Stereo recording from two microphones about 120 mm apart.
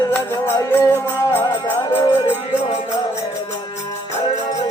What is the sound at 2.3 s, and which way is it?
Music, 65° left (ahead or behind).